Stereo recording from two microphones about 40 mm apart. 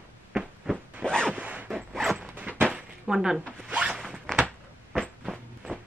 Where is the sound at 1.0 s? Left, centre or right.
Centre.